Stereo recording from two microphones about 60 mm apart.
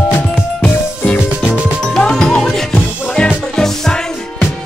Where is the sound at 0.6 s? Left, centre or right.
Left.